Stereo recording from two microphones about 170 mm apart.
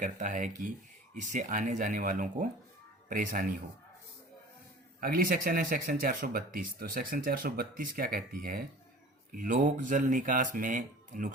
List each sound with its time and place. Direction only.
0.0 s speech: 50° right (ahead or behind)
4.9 s speech: 60° right (ahead or behind)